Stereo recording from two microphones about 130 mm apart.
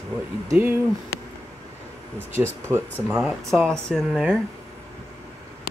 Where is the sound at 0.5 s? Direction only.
15° right (ahead or behind).